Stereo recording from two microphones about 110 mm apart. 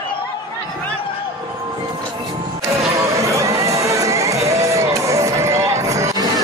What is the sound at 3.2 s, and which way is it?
Run, 25° right (ahead or behind).